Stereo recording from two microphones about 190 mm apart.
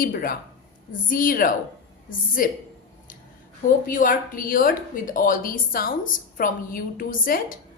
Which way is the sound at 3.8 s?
45° left (ahead or behind).